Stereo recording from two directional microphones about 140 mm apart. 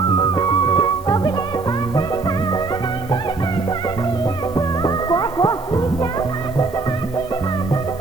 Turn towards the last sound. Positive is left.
turn(degrees=30)  # may be behind; listen again after turning